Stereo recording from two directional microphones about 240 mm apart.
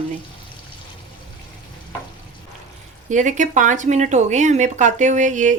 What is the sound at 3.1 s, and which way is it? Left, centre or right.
A woman's voice, right.